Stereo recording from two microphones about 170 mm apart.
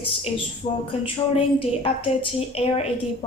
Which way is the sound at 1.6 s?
35° left (ahead or behind).